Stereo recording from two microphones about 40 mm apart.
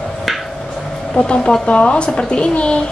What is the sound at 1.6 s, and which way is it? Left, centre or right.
A woman's voice, left.